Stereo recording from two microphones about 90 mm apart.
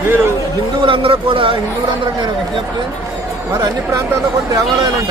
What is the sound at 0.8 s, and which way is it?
Speech, 85° right.